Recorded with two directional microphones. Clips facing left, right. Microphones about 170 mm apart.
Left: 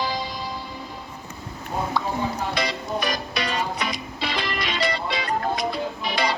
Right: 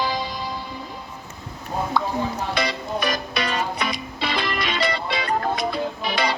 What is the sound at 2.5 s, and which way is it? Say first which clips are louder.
Music: right 1 dB; 60° right (ahead or behind).